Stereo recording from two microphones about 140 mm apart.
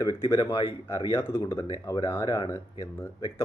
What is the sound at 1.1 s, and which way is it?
Speech, 15° left (ahead or behind).